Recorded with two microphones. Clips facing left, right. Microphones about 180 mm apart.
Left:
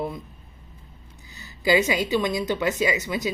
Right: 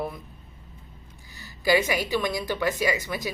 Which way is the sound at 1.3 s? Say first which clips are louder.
Left 1 dB; 20° left (ahead or behind).